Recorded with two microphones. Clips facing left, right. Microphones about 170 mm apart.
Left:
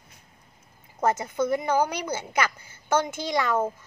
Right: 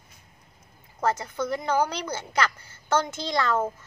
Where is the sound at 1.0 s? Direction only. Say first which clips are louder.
Left 2 dB; 15° left (ahead or behind).